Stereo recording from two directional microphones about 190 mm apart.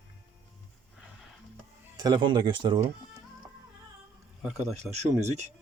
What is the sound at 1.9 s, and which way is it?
Speech, 20° right (ahead or behind).